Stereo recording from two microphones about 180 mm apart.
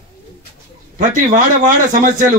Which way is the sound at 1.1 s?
45° right (ahead or behind).